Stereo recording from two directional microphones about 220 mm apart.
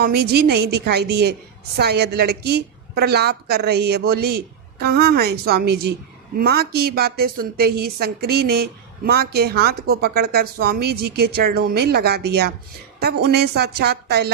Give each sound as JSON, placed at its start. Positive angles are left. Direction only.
{"t": 0.0, "sound": "a woman's voice", "side_deg": -45}